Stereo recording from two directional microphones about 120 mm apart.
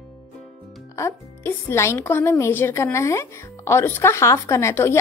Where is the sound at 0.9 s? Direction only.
20° left (ahead or behind).